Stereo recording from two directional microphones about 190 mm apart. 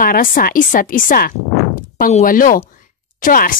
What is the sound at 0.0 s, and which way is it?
A woman's voice, 50° left (ahead or behind).